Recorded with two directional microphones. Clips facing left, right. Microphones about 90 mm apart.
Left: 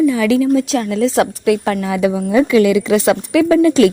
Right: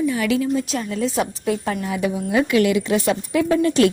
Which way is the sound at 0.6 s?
90° left.